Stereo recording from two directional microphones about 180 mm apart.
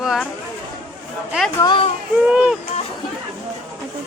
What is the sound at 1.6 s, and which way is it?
Speech, 25° left (ahead or behind).